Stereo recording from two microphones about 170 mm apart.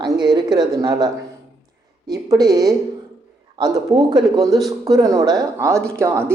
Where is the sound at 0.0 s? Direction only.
25° right (ahead or behind).